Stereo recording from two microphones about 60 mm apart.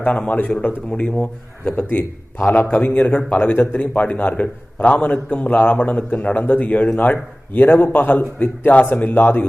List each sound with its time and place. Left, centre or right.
0.0 s a man's voice: centre
1.7 s a man's voice: left